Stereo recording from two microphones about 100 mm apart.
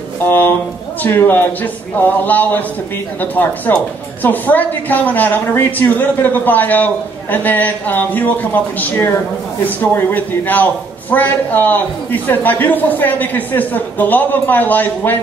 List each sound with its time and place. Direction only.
0.2 s a man's voice: 20° left (ahead or behind)